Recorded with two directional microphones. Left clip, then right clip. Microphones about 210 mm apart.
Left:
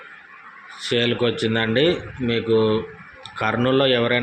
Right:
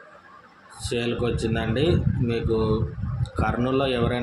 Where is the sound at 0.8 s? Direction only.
15° left (ahead or behind).